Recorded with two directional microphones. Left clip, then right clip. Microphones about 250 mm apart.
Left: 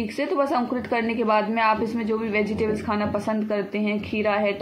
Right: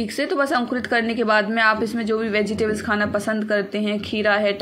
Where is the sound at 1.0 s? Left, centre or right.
Right.